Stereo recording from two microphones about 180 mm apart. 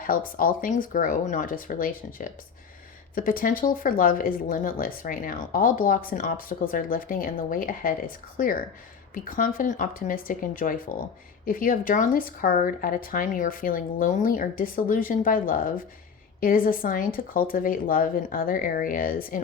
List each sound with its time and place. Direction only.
0.0 s speech: 50° left (ahead or behind)